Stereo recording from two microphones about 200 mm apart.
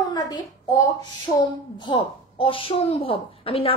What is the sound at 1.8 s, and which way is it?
Speech, 25° left (ahead or behind).